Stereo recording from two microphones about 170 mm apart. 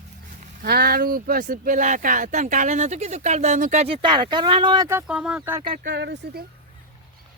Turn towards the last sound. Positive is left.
turn(degrees=-80)